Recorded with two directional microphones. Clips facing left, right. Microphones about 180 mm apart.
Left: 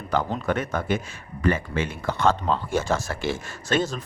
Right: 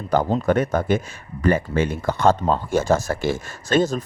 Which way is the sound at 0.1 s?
40° right (ahead or behind).